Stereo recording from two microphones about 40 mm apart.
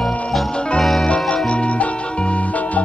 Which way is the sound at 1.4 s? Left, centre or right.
Left.